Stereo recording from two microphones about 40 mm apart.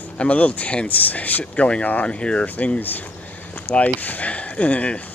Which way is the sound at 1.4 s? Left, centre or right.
Left.